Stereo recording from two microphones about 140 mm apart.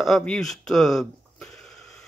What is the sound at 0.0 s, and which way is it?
Speech, 5° left (ahead or behind).